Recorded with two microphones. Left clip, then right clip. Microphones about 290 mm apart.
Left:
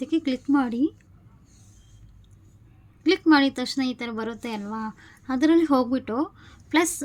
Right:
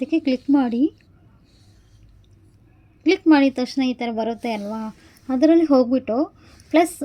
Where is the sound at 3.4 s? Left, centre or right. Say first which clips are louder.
Right 5 dB; left.